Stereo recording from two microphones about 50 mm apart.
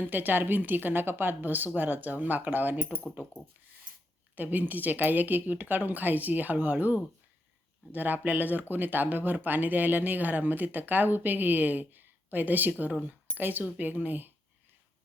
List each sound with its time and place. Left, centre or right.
0.0 s speech: right
4.4 s speech: right